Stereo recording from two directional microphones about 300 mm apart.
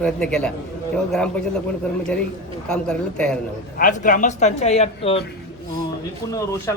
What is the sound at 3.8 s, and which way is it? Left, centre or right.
Speech, left.